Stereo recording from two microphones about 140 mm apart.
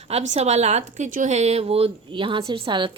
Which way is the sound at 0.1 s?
50° right (ahead or behind).